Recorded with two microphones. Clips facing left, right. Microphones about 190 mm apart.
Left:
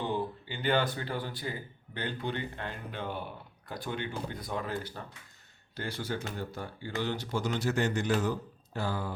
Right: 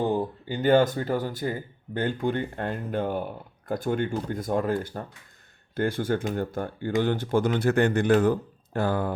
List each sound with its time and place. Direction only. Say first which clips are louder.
0.0 s speech: right 7 dB; 45° right (ahead or behind)